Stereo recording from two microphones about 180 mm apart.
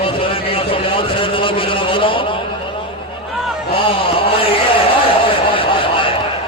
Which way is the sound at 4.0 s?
30° left (ahead or behind).